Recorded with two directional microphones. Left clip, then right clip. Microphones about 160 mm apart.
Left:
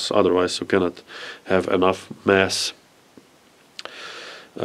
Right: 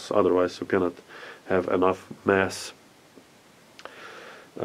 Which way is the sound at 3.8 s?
25° left (ahead or behind).